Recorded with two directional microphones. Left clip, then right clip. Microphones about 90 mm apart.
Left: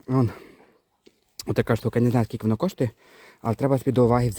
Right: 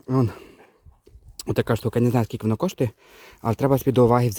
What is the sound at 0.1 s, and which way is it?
Speech, 5° right (ahead or behind).